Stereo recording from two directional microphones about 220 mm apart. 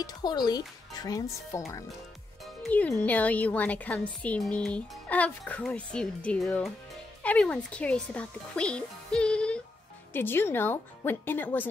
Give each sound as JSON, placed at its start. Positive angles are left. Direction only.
{"t": 0.0, "sound": "speech", "side_deg": 20}
{"t": 2.4, "sound": "speech", "side_deg": 5}